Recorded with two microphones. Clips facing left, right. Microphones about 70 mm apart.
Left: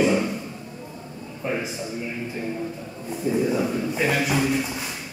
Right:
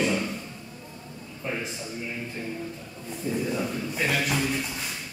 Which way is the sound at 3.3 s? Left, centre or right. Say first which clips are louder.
Left 6 dB; centre.